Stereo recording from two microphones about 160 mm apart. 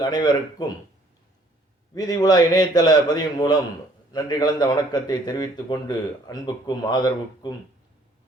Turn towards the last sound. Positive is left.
turn(degrees=25)  # may be behind; listen again after turning